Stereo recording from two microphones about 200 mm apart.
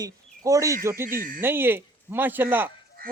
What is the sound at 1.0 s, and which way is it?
Speech, 45° right (ahead or behind).